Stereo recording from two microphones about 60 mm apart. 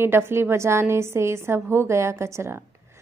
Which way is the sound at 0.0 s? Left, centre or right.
Right.